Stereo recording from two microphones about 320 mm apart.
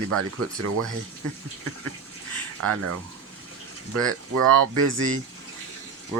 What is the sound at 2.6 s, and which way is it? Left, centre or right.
Speech, right.